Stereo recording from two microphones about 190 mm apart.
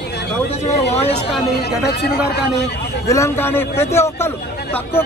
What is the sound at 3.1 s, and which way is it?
A man's voice, 15° left (ahead or behind).